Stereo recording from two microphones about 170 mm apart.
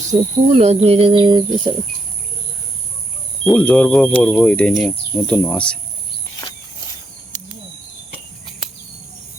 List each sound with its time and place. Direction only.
0.5 s speech: 40° right (ahead or behind)
3.4 s speech: 5° left (ahead or behind)